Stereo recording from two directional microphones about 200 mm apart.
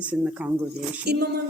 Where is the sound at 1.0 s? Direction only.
55° right (ahead or behind).